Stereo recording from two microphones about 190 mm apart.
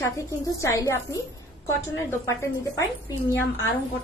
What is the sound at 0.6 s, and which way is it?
A woman's voice, 15° left (ahead or behind).